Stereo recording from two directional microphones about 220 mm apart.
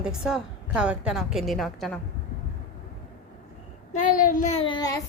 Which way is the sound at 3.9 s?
35° left (ahead or behind).